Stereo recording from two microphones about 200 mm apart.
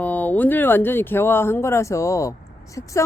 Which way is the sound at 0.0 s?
10° left (ahead or behind).